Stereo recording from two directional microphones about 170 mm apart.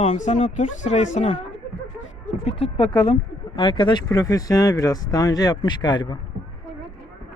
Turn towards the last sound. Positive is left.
turn(degrees=25)  # may be behind; listen again after turning